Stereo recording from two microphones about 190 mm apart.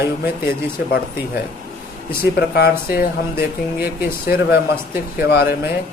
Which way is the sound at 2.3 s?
55° left (ahead or behind).